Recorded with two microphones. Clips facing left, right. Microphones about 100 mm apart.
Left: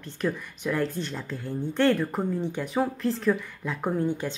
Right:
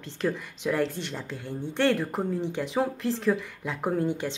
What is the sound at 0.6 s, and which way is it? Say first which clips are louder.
Speech: even; 25° right (ahead or behind).